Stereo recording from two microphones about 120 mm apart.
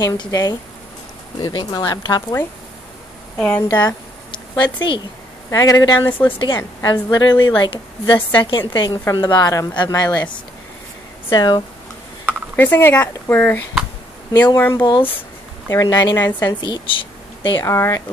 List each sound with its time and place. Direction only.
0.0 s a woman's voice: 30° left (ahead or behind)
3.3 s a woman's voice: 10° left (ahead or behind)
3.8 s a sound: 40° left (ahead or behind)
5.5 s a woman's voice: 25° left (ahead or behind)
6.0 s a woman's voice: 15° left (ahead or behind)
6.4 s a woman's voice: 35° left (ahead or behind)
11.2 s a woman's voice: 35° left (ahead or behind)
12.3 s mechanisms: 15° left (ahead or behind)
13.0 s a woman's voice: 15° left (ahead or behind)
16.6 s speech: 40° left (ahead or behind)
17.6 s a woman's voice: 25° left (ahead or behind)